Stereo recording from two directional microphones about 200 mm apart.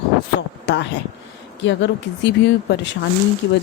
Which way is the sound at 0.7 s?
60° left (ahead or behind).